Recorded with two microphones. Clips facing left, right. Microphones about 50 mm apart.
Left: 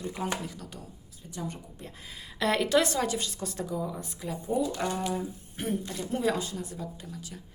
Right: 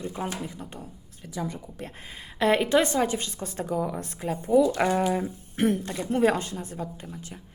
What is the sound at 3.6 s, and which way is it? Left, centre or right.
Speech, right.